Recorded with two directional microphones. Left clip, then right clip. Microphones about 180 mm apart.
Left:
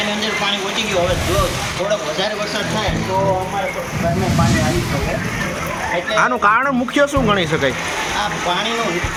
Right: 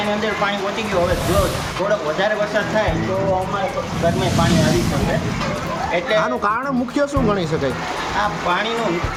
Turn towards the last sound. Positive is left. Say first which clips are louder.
# left 3 dB
turn(degrees=-5)  # may be behind; listen again after turning